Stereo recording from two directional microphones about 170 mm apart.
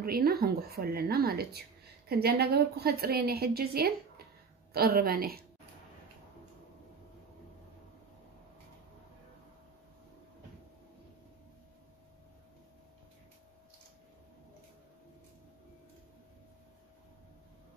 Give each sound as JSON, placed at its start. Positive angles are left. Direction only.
{"t": 0.0, "sound": "a woman's voice", "side_deg": -65}